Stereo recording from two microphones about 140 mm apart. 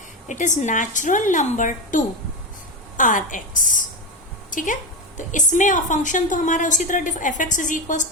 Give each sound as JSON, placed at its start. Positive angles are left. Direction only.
{"t": 0.3, "sound": "a woman's voice", "side_deg": 60}